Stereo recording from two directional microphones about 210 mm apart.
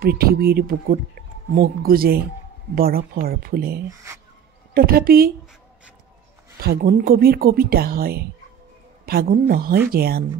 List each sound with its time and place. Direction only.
0.0 s speech: 45° right (ahead or behind)
6.6 s speech: 45° right (ahead or behind)
9.3 s speech: 45° right (ahead or behind)